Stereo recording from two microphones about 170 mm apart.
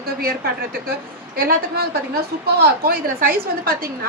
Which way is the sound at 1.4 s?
60° right (ahead or behind).